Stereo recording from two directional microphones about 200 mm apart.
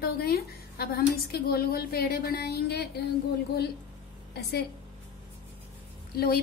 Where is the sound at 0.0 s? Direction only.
50° left (ahead or behind).